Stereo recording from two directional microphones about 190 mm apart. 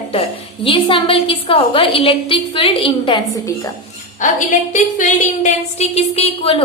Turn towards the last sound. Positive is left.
turn(degrees=30)  # may be behind; listen again after turning